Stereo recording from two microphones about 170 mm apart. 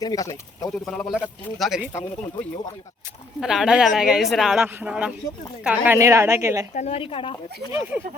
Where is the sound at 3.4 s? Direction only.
5° right (ahead or behind).